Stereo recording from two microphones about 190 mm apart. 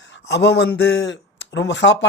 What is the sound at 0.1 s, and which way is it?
Speech, 65° left (ahead or behind).